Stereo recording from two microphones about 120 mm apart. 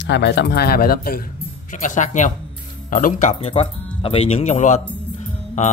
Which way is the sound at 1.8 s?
90° left.